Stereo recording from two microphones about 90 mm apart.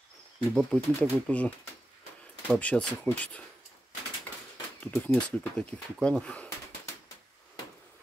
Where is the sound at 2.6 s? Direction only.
15° left (ahead or behind).